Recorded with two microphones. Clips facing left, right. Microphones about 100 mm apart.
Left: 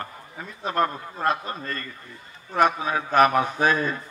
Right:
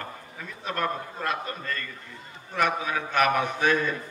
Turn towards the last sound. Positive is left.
turn(degrees=35)  # may be behind; listen again after turning